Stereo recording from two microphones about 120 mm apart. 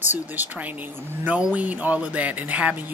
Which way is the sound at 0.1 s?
15° right (ahead or behind).